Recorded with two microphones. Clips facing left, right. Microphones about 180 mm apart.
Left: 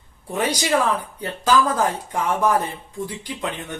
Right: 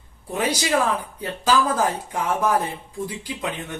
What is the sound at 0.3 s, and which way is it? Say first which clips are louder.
A woman's voice: left 1 dB; 10° right (ahead or behind).